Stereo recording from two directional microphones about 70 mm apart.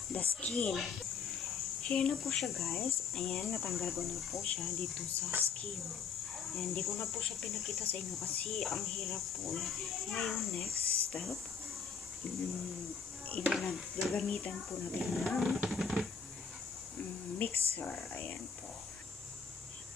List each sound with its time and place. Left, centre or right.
0.1 s speech: centre
1.8 s speech: centre
2.2 s speech: centre
6.3 s speech: centre
13.5 s speech: centre
14.1 s speech: centre
15.0 s speech: centre
17.4 s speech: left